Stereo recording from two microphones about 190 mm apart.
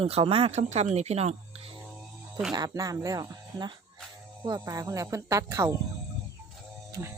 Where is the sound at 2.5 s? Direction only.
20° right (ahead or behind).